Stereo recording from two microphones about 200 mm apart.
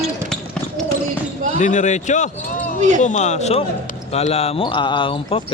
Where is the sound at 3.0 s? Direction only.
35° left (ahead or behind).